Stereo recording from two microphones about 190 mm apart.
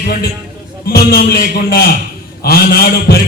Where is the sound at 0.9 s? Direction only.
55° left (ahead or behind).